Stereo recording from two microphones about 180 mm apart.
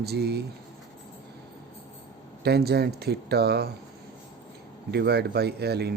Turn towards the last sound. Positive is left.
turn(degrees=-65)  # may be behind; listen again after turning